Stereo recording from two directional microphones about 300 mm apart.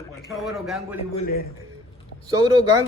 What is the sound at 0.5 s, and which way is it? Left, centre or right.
Speech, centre.